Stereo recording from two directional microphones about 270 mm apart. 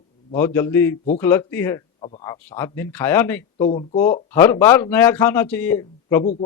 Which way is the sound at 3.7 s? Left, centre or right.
Left.